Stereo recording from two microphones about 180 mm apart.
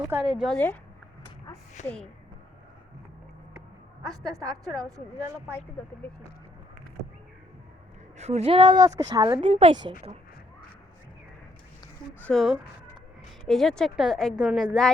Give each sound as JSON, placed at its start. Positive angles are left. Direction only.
{"t": 0.0, "sound": "a woman's voice", "side_deg": -10}
{"t": 0.3, "sound": "a woman's voice", "side_deg": 5}
{"t": 1.8, "sound": "a woman's voice", "side_deg": 40}
{"t": 4.3, "sound": "a woman's voice", "side_deg": -20}
{"t": 8.2, "sound": "a woman's voice", "side_deg": -35}
{"t": 12.2, "sound": "a woman's voice", "side_deg": 0}